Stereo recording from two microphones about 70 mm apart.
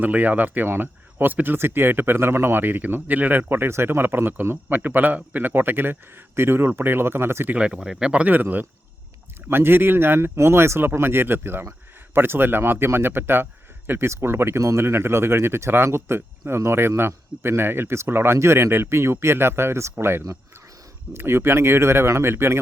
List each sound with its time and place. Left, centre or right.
0.0 s a man's voice: right
7.5 s a man's voice: centre; by 22.6 s right